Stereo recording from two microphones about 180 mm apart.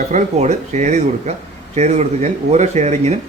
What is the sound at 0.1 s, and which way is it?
Speech, 40° right (ahead or behind).